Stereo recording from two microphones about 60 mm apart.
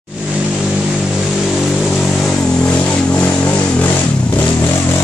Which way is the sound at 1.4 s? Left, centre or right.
Centre.